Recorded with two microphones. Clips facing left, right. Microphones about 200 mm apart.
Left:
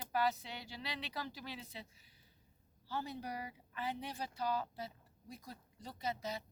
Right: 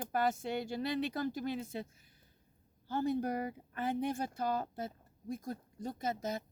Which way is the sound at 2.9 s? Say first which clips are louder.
Right 9 dB; 50° right (ahead or behind).